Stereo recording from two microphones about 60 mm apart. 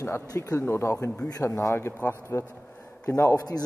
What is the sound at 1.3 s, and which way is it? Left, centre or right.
Speech, left.